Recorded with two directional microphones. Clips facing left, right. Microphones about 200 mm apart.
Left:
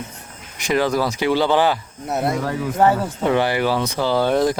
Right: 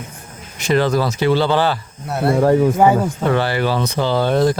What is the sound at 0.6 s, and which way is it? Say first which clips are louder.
Speech: right 2 dB; 10° left (ahead or behind).